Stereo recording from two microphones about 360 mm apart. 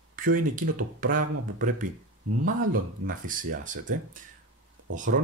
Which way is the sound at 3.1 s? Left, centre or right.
Right.